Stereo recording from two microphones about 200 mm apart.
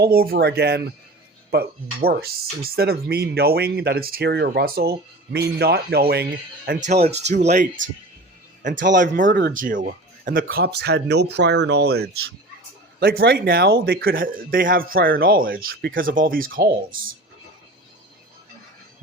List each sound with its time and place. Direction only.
0.0 s speech: 50° right (ahead or behind)
2.0 s speech: 50° right (ahead or behind)
6.7 s speech: 35° right (ahead or behind)
8.8 s speech: 40° right (ahead or behind)